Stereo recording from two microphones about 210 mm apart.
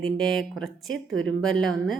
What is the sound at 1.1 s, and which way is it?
Speech, 75° right (ahead or behind).